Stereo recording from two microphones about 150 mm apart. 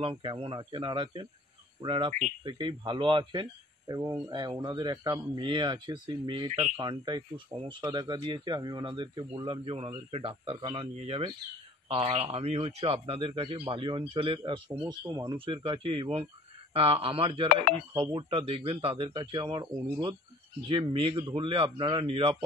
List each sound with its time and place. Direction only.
0.0 s speech: 35° right (ahead or behind)